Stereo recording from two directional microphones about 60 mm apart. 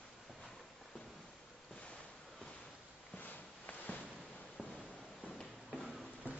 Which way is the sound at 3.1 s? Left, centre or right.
Left.